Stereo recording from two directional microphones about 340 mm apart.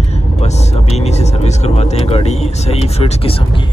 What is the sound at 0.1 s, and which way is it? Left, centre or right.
Speech, centre.